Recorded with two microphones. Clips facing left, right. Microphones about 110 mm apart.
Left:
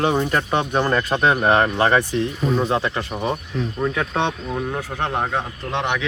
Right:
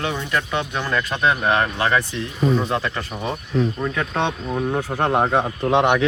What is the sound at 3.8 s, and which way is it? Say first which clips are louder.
Speech: left 1 dB; 5° left (ahead or behind).